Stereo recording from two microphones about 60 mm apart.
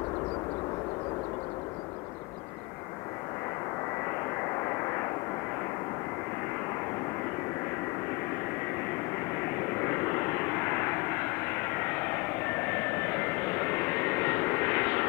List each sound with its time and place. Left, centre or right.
9.6 s vehicle: left